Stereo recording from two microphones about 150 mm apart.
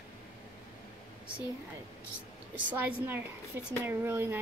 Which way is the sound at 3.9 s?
15° right (ahead or behind).